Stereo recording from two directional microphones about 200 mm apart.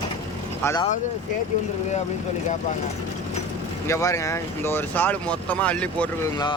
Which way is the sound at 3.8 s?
15° left (ahead or behind).